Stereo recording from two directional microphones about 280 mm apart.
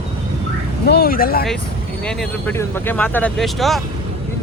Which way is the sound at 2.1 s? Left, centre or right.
Centre.